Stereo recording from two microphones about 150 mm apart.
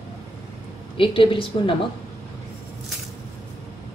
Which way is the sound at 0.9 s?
35° left (ahead or behind).